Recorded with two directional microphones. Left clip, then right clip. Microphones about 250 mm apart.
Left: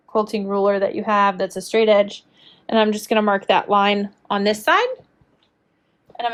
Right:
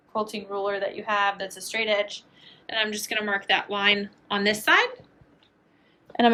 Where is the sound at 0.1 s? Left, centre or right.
Left.